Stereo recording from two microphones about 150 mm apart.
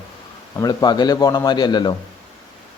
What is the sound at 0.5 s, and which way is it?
Speech, 25° left (ahead or behind).